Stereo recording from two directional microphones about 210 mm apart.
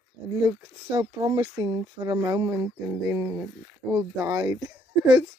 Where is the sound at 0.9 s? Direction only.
20° right (ahead or behind).